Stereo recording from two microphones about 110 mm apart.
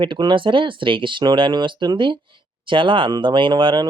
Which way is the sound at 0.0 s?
45° right (ahead or behind).